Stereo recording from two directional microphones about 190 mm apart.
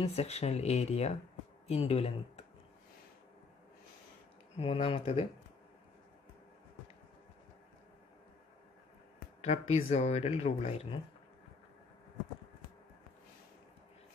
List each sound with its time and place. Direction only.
0.0 s speech: 35° left (ahead or behind)
4.6 s speech: 30° left (ahead or behind)
9.4 s speech: 35° left (ahead or behind)